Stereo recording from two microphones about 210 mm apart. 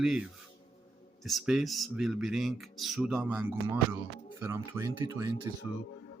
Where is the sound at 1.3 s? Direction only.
Centre (ahead or behind).